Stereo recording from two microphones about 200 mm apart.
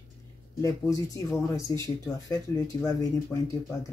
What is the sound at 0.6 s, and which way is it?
Speech, 15° left (ahead or behind).